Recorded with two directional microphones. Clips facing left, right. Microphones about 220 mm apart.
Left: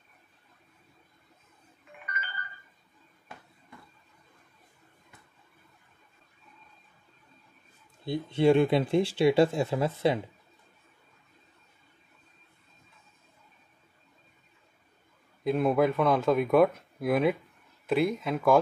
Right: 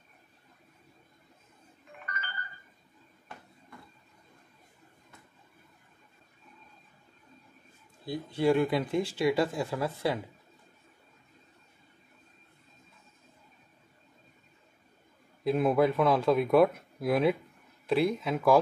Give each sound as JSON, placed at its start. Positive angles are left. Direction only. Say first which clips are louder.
{"t": 8.0, "sound": "speech", "louder": "left 4 dB", "side_deg": 25}
{"t": 15.4, "sound": "speech", "louder": "even", "side_deg": 0}